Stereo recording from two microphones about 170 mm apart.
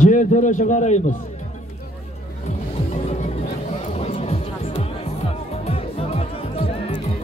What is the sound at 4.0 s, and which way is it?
Music, 35° left (ahead or behind).